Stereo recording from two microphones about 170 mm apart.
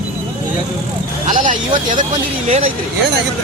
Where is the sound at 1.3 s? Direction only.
50° right (ahead or behind).